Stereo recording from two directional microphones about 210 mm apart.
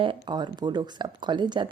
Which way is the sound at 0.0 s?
25° right (ahead or behind).